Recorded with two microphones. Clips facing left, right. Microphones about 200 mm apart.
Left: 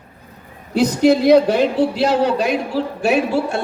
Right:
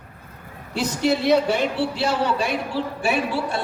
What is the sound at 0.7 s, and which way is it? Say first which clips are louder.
A woman's voice: left 8 dB; 40° left (ahead or behind).